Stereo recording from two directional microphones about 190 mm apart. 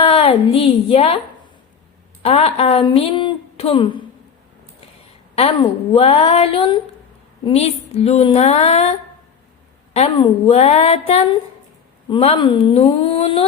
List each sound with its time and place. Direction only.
0.0 s a woman's voice: 30° left (ahead or behind)
2.2 s a woman's voice: 30° left (ahead or behind)
5.3 s speech: 30° left (ahead or behind)